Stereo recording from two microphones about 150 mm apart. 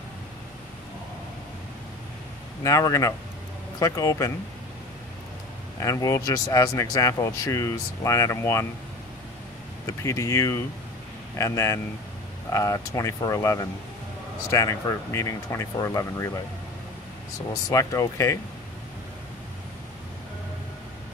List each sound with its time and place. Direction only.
2.6 s speech: 20° left (ahead or behind)
5.8 s speech: 20° left (ahead or behind)
9.8 s speech: 20° left (ahead or behind)
17.6 s speech: 20° left (ahead or behind)